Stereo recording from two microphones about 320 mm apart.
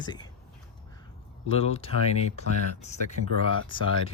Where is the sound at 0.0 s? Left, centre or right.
Centre.